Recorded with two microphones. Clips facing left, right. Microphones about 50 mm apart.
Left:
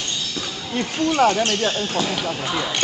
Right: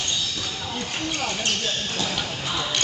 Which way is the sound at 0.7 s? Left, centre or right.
Left.